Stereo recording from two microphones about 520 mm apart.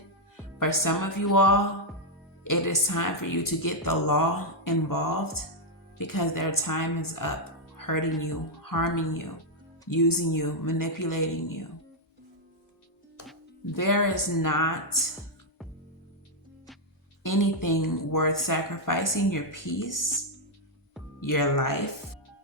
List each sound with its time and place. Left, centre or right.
0.6 s a woman's voice: left
13.7 s a woman's voice: left
17.2 s a woman's voice: left
21.2 s a woman's voice: left